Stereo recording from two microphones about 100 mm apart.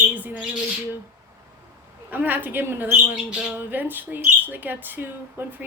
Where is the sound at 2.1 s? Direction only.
15° right (ahead or behind).